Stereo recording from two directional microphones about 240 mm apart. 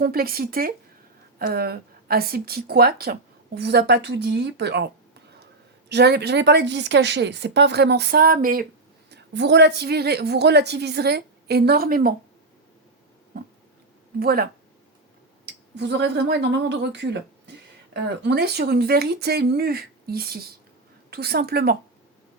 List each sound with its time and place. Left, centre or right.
0.0 s speech: right
5.9 s speech: right
14.2 s speech: right
15.7 s speech: right